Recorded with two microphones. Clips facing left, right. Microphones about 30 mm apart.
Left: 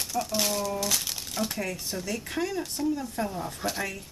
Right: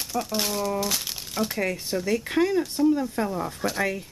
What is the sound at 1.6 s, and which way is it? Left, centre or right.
Speech, right.